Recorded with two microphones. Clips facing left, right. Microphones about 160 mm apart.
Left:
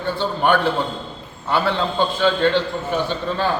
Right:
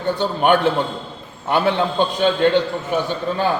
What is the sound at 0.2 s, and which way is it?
A man's voice, 20° right (ahead or behind).